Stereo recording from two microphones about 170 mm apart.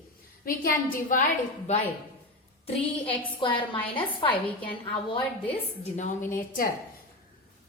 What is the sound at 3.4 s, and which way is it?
Speech, 30° left (ahead or behind).